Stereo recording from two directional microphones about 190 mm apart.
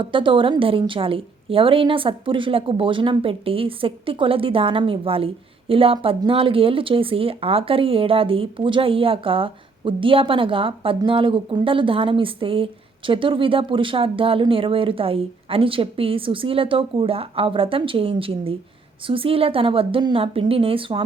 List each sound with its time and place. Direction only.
0.0 s a woman's voice: 25° right (ahead or behind)